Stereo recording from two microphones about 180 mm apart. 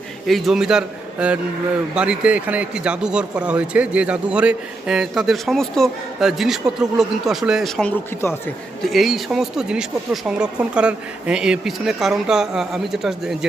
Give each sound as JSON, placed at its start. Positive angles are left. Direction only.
{"t": 0.3, "sound": "speech", "side_deg": 0}